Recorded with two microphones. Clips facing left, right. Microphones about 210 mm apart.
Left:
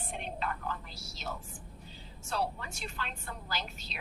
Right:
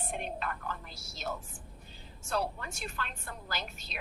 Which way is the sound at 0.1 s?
50° right (ahead or behind).